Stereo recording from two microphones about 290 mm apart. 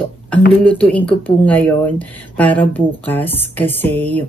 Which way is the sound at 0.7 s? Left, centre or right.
Centre.